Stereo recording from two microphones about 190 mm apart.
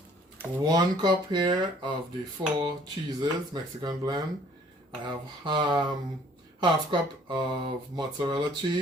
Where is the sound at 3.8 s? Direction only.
20° right (ahead or behind).